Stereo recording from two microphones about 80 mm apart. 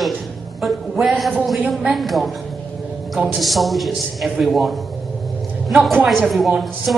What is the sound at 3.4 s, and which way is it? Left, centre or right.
A man's voice, centre.